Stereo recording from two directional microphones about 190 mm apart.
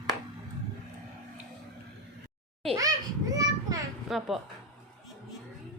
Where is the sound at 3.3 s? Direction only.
20° right (ahead or behind).